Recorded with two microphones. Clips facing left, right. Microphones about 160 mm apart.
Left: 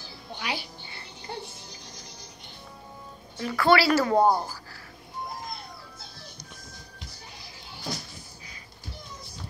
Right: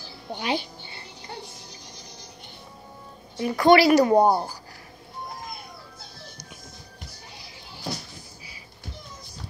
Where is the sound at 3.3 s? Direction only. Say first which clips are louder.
Right 5 dB; 20° right (ahead or behind).